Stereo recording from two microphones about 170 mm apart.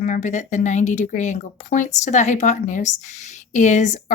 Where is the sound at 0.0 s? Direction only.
45° left (ahead or behind).